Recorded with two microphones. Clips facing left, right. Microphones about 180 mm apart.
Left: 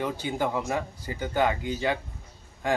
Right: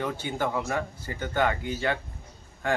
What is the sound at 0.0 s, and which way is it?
Speech, 15° left (ahead or behind).